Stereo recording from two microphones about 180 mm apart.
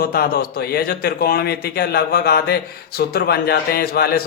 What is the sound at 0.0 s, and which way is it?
A man's voice, 60° left (ahead or behind).